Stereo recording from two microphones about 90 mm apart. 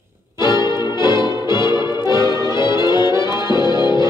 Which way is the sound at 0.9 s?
55° left (ahead or behind).